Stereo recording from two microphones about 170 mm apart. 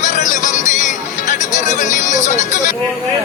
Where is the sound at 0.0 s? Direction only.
50° left (ahead or behind).